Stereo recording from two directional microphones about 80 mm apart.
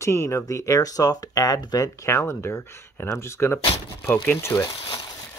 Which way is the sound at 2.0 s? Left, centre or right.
Left.